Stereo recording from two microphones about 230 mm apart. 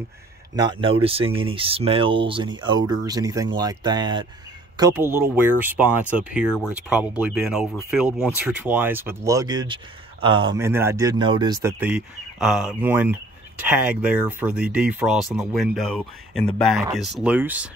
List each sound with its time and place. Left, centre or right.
0.6 s speech: right